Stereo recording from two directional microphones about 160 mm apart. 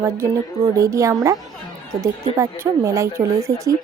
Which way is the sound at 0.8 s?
20° right (ahead or behind).